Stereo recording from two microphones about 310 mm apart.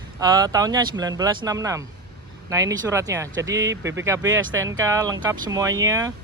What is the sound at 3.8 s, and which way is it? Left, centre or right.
Speech, right.